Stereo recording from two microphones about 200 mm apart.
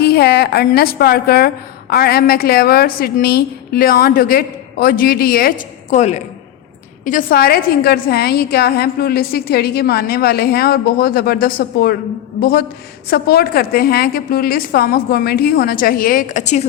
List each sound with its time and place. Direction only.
0.0 s a woman's voice: 55° left (ahead or behind); by 16.6 s 35° left (ahead or behind)